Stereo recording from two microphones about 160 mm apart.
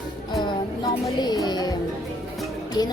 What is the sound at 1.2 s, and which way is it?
Music, 25° left (ahead or behind).